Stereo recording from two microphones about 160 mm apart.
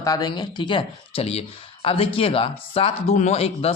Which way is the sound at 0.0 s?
25° left (ahead or behind).